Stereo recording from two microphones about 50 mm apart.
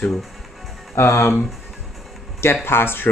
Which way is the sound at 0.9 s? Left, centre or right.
Left.